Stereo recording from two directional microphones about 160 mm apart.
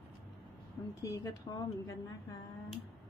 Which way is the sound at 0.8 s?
15° left (ahead or behind).